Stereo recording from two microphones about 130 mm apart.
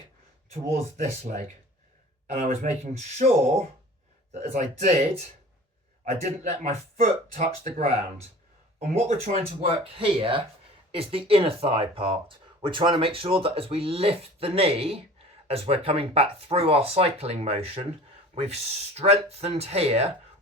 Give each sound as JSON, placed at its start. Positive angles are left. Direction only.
{"t": 1.3, "sound": "speech", "side_deg": -80}
{"t": 2.3, "sound": "speech", "side_deg": -60}
{"t": 4.4, "sound": "speech", "side_deg": -55}
{"t": 6.1, "sound": "speech", "side_deg": -60}
{"t": 8.8, "sound": "speech", "side_deg": -80}
{"t": 9.6, "sound": "speech", "side_deg": -45}